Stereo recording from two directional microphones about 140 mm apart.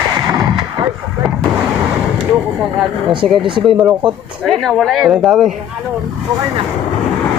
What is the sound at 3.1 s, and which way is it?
Speech, 35° right (ahead or behind).